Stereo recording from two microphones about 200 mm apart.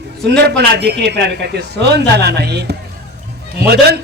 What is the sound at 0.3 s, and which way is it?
A man's voice, 55° right (ahead or behind).